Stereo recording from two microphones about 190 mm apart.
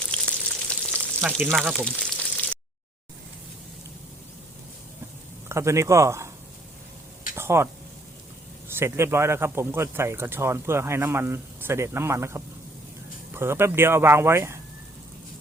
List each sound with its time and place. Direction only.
0.0 s frying: 5° left (ahead or behind)
1.5 s speech: centre (ahead or behind)
2.0 s a sound: 5° left (ahead or behind)
5.5 s speech: 15° right (ahead or behind)
7.3 s a sound: 15° right (ahead or behind)
8.7 s speech: 15° right (ahead or behind)